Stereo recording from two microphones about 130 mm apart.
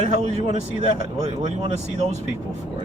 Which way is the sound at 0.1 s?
55° right (ahead or behind).